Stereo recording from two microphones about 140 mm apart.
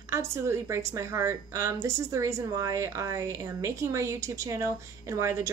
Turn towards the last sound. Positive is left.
turn(degrees=-20)  # may be behind; listen again after turning